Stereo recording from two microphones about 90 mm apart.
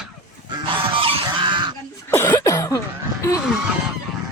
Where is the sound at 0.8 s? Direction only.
90° right; by 1.7 s 60° right (ahead or behind).